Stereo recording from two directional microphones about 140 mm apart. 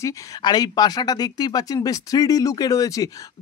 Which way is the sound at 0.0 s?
30° left (ahead or behind).